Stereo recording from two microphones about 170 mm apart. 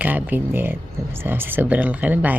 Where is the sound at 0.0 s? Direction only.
10° right (ahead or behind).